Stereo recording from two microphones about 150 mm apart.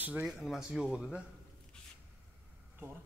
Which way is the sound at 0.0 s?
10° right (ahead or behind).